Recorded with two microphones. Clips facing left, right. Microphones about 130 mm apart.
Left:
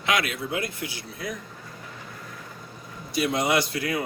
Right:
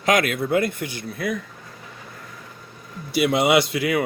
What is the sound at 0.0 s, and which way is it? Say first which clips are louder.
A man's voice: right 6 dB; 45° right (ahead or behind).